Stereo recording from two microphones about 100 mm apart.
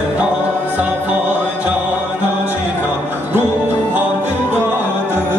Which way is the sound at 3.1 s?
20° right (ahead or behind).